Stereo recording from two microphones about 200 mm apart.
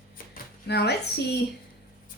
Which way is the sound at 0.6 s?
55° left (ahead or behind).